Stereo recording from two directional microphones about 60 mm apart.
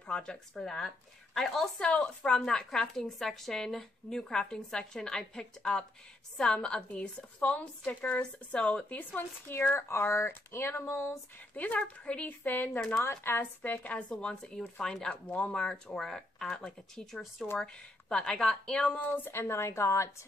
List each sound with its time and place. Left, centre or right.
0.0 s a woman's voice: centre; by 9.6 s left
10.1 s speech: left
11.5 s a woman's voice: left
12.4 s speech: left
13.6 s a woman's voice: left; by 17.5 s centre
17.6 s a woman's voice: centre
19.1 s a woman's voice: left